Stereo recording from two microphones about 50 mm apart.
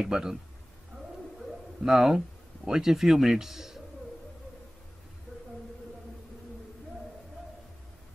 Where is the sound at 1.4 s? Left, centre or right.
Centre.